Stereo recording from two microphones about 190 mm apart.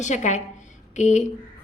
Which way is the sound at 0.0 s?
40° left (ahead or behind).